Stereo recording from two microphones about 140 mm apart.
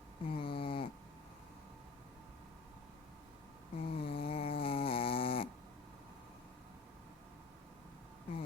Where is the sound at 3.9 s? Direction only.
40° left (ahead or behind).